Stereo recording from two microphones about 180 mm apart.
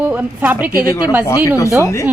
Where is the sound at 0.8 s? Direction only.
20° left (ahead or behind).